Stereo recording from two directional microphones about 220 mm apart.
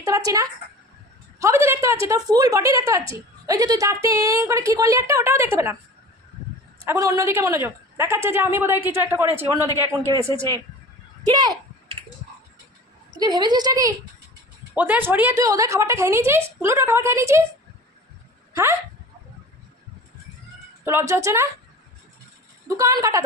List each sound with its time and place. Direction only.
0.0 s a woman's voice: 15° right (ahead or behind)
6.7 s a woman's voice: 10° right (ahead or behind)
11.2 s a sound: 15° right (ahead or behind)
13.1 s a woman's voice: 20° right (ahead or behind)
21.1 s a woman's voice: 15° right (ahead or behind)
22.8 s a woman's voice: 15° right (ahead or behind)